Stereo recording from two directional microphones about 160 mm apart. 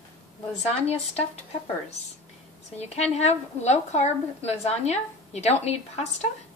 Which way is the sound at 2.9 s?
40° left (ahead or behind).